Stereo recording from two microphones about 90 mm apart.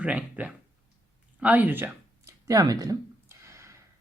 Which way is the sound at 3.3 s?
30° right (ahead or behind).